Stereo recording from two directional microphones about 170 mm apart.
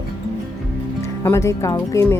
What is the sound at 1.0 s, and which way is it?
Speech, 15° left (ahead or behind).